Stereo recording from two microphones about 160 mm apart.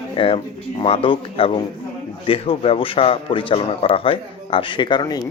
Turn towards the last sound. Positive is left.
turn(degrees=25)  # may be behind; listen again after turning